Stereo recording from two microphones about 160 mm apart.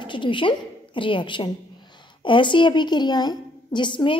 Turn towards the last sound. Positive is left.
turn(degrees=30)  # may be behind; listen again after turning